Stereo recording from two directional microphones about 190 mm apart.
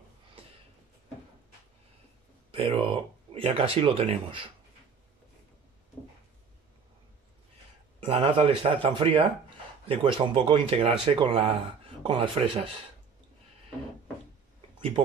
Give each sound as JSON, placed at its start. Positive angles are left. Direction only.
{"t": 2.5, "sound": "speech", "side_deg": -30}
{"t": 8.0, "sound": "speech", "side_deg": -25}
{"t": 15.0, "sound": "speech", "side_deg": -30}